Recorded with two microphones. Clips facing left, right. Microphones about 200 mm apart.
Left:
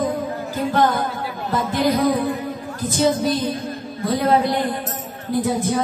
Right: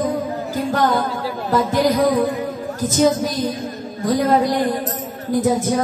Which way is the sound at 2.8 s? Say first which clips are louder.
Right 2 dB; 45° right (ahead or behind).